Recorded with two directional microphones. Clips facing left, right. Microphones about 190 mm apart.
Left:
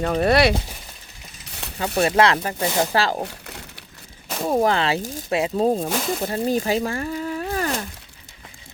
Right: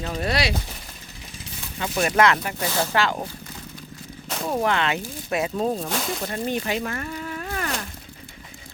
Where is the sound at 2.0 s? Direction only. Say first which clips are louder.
Left 2 dB; 30° left (ahead or behind).